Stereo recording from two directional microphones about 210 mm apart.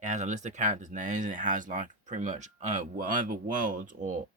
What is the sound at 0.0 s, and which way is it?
Speech, 35° right (ahead or behind).